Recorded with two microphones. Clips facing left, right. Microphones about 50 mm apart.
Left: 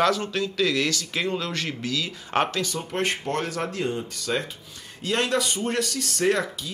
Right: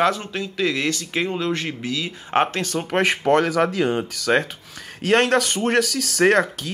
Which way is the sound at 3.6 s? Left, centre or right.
Right.